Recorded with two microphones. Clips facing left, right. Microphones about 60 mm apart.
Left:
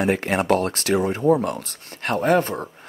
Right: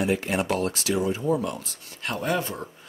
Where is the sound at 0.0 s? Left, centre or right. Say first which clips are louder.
Left 4 dB; left.